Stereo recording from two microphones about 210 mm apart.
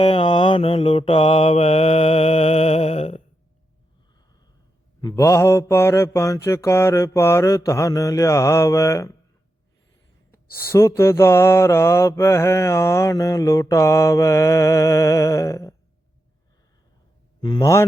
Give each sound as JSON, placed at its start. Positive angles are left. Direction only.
{"t": 0.0, "sound": "mantra", "side_deg": 25}
{"t": 4.9, "sound": "mantra", "side_deg": 15}
{"t": 10.3, "sound": "mantra", "side_deg": 10}
{"t": 17.4, "sound": "mantra", "side_deg": 20}